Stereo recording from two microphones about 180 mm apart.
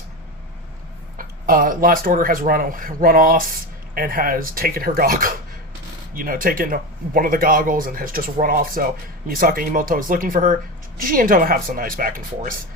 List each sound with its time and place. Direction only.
1.2 s speech: 50° right (ahead or behind)